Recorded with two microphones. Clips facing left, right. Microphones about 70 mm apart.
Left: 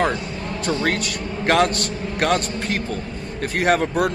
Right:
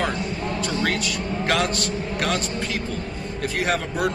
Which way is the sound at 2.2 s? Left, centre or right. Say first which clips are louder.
Left 6 dB; left.